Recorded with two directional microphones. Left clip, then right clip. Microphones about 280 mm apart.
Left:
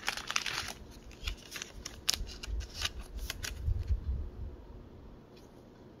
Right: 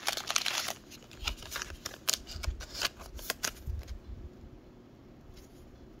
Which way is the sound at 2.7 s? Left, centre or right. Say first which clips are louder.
Right 3 dB; centre.